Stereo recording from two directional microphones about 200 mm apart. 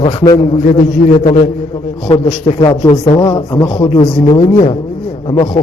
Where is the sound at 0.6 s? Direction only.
40° left (ahead or behind).